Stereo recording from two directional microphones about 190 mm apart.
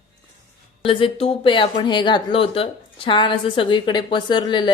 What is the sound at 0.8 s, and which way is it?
Speech, 30° left (ahead or behind).